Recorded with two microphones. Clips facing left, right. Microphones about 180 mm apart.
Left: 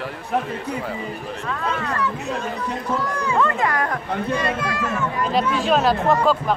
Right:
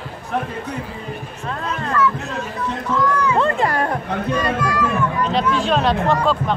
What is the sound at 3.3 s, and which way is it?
Music, 30° right (ahead or behind).